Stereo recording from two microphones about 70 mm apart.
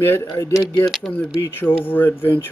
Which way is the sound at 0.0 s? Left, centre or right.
Left.